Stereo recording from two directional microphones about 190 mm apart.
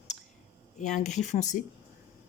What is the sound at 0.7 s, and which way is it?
Speech, 40° left (ahead or behind).